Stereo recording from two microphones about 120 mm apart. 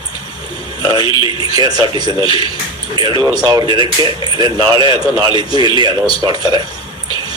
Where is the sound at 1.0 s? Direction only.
45° left (ahead or behind).